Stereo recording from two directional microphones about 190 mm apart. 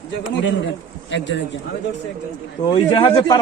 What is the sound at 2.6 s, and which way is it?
Speech, 25° left (ahead or behind).